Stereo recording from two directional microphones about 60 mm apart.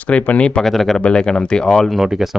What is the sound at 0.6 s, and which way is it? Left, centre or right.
Speech, centre.